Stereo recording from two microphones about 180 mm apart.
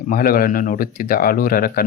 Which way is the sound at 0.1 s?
55° left (ahead or behind).